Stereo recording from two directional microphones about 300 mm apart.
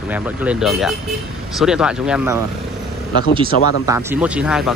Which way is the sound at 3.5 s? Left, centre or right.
Left.